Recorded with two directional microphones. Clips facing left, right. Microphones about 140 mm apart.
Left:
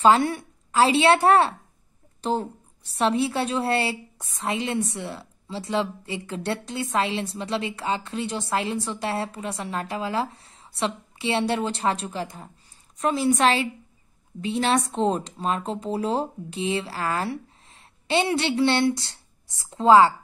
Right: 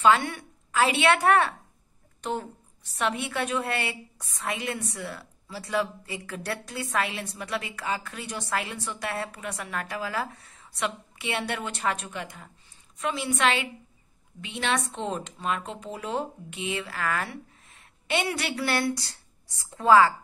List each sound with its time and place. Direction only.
0.0 s a woman's voice: 35° left (ahead or behind)